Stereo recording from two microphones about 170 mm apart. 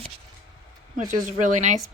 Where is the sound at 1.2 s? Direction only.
45° right (ahead or behind).